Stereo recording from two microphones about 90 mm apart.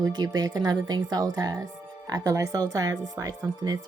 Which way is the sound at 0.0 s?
50° right (ahead or behind).